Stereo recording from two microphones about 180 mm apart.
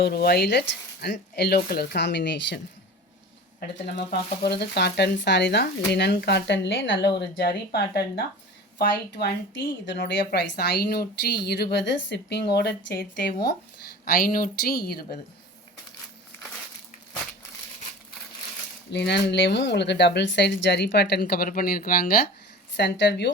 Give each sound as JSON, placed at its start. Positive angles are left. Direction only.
{"t": 0.0, "sound": "speech", "side_deg": 60}
{"t": 3.6, "sound": "speech", "side_deg": 65}
{"t": 7.7, "sound": "speech", "side_deg": 65}
{"t": 9.9, "sound": "speech", "side_deg": 75}
{"t": 14.0, "sound": "speech", "side_deg": 50}
{"t": 18.9, "sound": "speech", "side_deg": 75}
{"t": 22.8, "sound": "speech", "side_deg": 70}